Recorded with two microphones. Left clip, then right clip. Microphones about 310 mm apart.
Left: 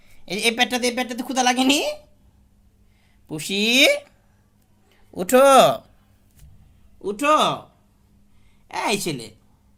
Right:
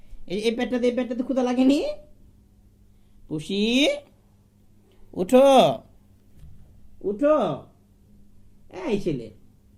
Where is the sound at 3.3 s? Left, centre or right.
Left.